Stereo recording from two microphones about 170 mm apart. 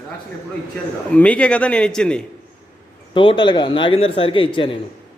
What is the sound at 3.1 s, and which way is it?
A man's voice, 30° left (ahead or behind).